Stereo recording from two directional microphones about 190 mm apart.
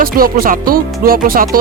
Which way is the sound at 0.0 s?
50° right (ahead or behind).